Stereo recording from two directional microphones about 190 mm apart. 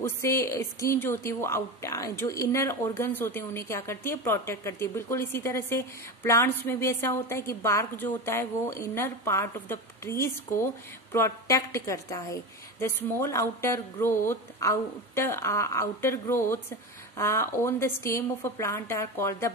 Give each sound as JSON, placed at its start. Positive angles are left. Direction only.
{"t": 0.0, "sound": "a woman's voice", "side_deg": 15}